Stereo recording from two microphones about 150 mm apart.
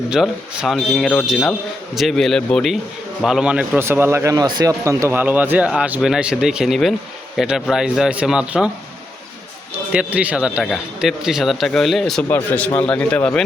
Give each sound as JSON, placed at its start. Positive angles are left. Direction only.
{"t": 0.1, "sound": "speech", "side_deg": 0}
{"t": 9.9, "sound": "speech", "side_deg": -10}
{"t": 12.3, "sound": "a man's voice", "side_deg": 10}